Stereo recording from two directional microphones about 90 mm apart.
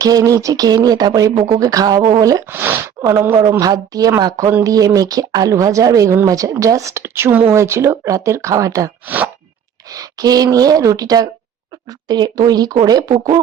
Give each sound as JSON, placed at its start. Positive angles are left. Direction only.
{"t": 0.0, "sound": "speech", "side_deg": -40}
{"t": 2.5, "sound": "speech", "side_deg": -25}
{"t": 3.6, "sound": "speech", "side_deg": -45}
{"t": 9.0, "sound": "speech", "side_deg": -20}
{"t": 9.9, "sound": "speech", "side_deg": -40}